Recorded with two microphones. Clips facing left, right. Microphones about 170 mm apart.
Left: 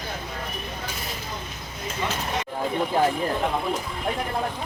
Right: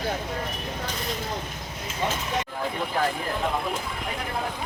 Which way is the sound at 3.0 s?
20° left (ahead or behind).